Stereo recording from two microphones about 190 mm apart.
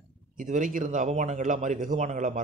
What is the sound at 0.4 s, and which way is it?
Speech, 45° right (ahead or behind).